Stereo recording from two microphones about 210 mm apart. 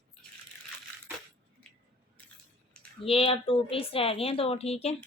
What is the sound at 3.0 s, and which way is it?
Speech, 25° left (ahead or behind).